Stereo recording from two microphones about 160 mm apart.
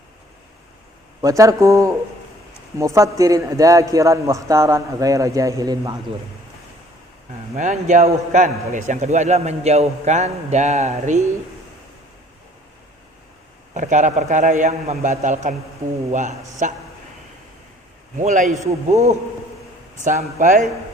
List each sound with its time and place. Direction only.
1.2 s a man's voice: 20° right (ahead or behind)
7.5 s a man's voice: 50° right (ahead or behind)
13.7 s a man's voice: 50° right (ahead or behind)
16.6 s a man's voice: 50° right (ahead or behind)
18.2 s a man's voice: 50° right (ahead or behind)